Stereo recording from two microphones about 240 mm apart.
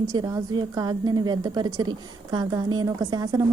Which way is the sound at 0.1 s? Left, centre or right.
Centre.